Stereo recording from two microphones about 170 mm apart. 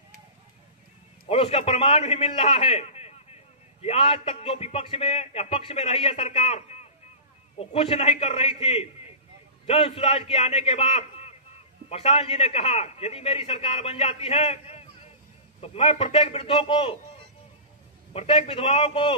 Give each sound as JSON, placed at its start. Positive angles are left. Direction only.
{"t": 1.3, "sound": "a man's voice", "side_deg": 35}
{"t": 18.1, "sound": "a man's voice", "side_deg": 35}